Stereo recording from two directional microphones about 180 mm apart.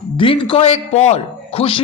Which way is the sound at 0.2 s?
25° left (ahead or behind).